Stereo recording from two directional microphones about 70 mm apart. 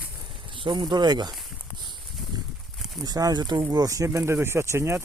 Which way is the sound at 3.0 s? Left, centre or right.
Right.